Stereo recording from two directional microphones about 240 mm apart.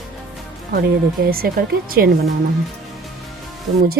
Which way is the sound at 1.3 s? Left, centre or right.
Right.